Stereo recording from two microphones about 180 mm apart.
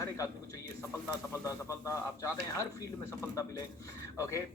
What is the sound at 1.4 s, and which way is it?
Speech, 15° left (ahead or behind).